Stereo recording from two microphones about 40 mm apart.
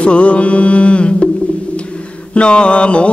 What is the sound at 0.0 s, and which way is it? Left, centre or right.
Mantra, left.